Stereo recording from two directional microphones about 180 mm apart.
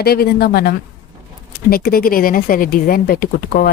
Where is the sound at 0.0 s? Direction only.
60° left (ahead or behind).